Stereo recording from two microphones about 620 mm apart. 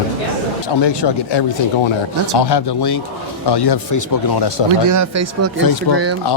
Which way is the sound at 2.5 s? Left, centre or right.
Left.